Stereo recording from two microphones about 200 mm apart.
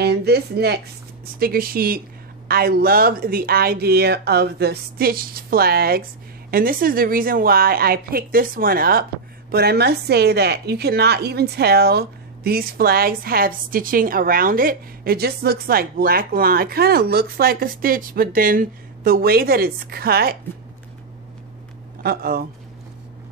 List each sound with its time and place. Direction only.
0.0 s a woman's voice: 55° right (ahead or behind)
22.0 s a woman's voice: 50° right (ahead or behind)